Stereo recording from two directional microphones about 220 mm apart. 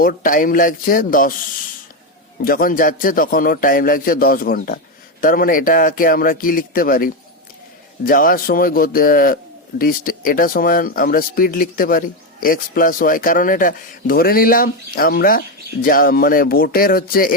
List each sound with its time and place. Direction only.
0.0 s a man's voice: 40° left (ahead or behind)
2.4 s a man's voice: 40° left (ahead or behind)